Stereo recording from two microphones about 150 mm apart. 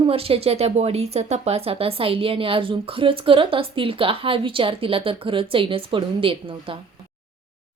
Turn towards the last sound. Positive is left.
turn(degrees=-35)  # may be behind; listen again after turning